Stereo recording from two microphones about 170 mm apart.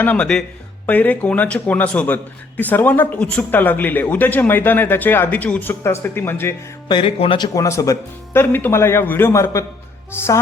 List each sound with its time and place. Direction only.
0.0 s a man's voice: 10° left (ahead or behind)
6.8 s a man's voice: 30° left (ahead or behind); by 10.4 s 15° left (ahead or behind)